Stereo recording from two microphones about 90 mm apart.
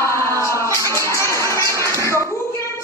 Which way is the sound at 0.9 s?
30° left (ahead or behind).